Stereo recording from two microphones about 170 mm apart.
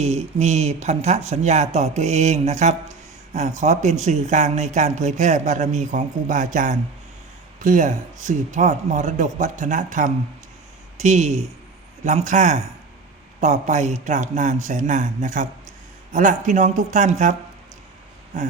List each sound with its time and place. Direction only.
0.0 s speech: 40° right (ahead or behind)